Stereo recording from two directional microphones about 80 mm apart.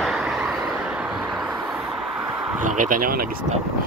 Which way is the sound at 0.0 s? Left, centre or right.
Centre.